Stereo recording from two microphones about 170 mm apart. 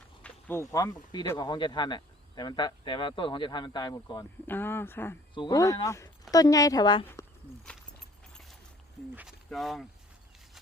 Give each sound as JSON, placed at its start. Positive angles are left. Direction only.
{"t": 0.2, "sound": "speech", "side_deg": 10}
{"t": 4.4, "sound": "speech", "side_deg": 10}
{"t": 5.3, "sound": "speech", "side_deg": 25}
{"t": 7.0, "sound": "speech", "side_deg": 15}
{"t": 8.3, "sound": "a sound", "side_deg": 0}
{"t": 9.1, "sound": "speech", "side_deg": 0}